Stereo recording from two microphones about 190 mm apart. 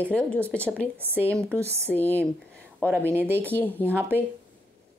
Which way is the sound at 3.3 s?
10° left (ahead or behind).